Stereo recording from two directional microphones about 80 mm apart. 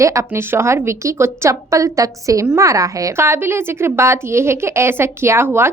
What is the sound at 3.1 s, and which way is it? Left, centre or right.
A woman's voice, right.